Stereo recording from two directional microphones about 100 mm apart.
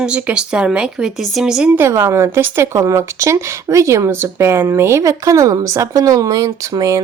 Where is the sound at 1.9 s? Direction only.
30° right (ahead or behind).